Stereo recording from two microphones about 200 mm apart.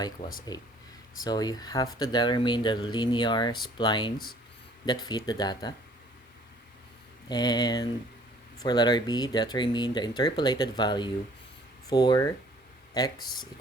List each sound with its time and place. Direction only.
0.2 s speech: 35° left (ahead or behind)
1.2 s speech: 20° left (ahead or behind)
7.3 s speech: 20° left (ahead or behind)